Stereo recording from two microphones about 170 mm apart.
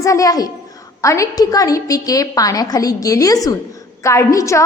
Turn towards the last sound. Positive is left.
turn(degrees=20)  # may be behind; listen again after turning